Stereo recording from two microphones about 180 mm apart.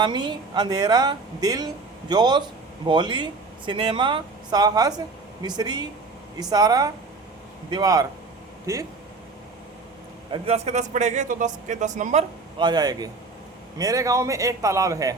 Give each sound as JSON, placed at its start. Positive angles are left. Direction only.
{"t": 0.0, "sound": "a man's voice", "side_deg": -25}
{"t": 10.4, "sound": "speech", "side_deg": -35}
{"t": 12.5, "sound": "a man's voice", "side_deg": -25}